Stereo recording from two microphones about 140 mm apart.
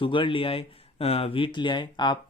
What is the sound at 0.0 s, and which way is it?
Speech, 35° left (ahead or behind).